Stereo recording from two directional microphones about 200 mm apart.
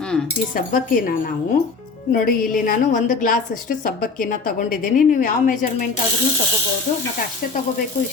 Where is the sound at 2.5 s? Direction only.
45° left (ahead or behind).